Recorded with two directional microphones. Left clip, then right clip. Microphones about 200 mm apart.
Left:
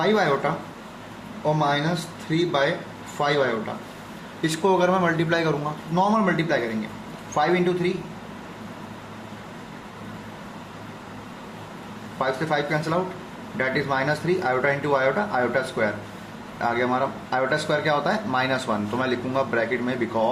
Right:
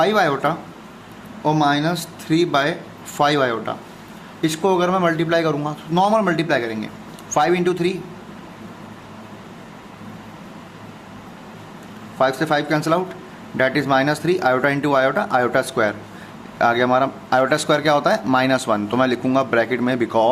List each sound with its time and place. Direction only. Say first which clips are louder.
0.0 s speech: right 4 dB; 50° right (ahead or behind)
4.4 s speech: right 2 dB; 30° right (ahead or behind)
5.9 s speech: right 5 dB; 45° right (ahead or behind)
12.2 s speech: right 6 dB; 50° right (ahead or behind)